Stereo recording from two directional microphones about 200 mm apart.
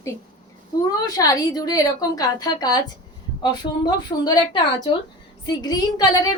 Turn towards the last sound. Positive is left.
turn(degrees=20)  # may be behind; listen again after turning